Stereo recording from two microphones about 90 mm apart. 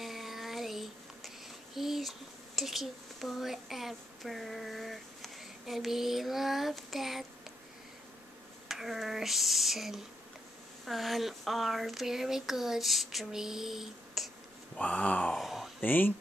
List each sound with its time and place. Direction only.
0.0 s a sound: centre (ahead or behind)
1.8 s speech: centre (ahead or behind)
8.6 s speech: 5° right (ahead or behind)
14.8 s speech: 15° left (ahead or behind)
15.3 s a sound: centre (ahead or behind)
15.8 s speech: 20° left (ahead or behind)